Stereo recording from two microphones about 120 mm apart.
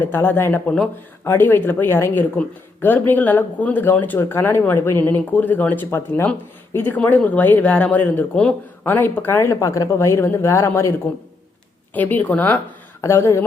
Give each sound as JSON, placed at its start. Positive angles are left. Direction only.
{"t": 0.0, "sound": "speech", "side_deg": 15}
{"t": 11.9, "sound": "speech", "side_deg": 15}